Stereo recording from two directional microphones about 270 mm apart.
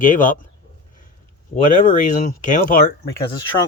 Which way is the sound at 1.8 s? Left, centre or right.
Left.